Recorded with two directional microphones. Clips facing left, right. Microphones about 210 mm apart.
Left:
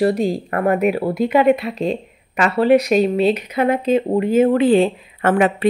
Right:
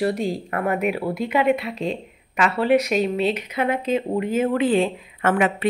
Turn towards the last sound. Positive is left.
turn(degrees=35)  # may be behind; listen again after turning